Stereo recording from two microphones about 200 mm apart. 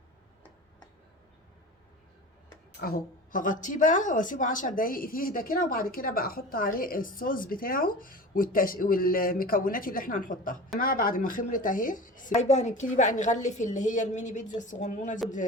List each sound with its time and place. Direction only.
2.8 s a woman's voice: 45° left (ahead or behind)